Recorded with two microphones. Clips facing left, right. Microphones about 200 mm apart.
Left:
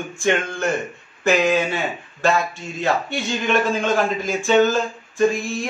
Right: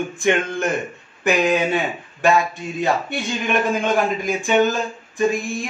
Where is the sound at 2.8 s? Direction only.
15° right (ahead or behind).